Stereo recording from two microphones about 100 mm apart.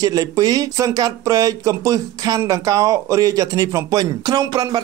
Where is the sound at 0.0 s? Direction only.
40° right (ahead or behind).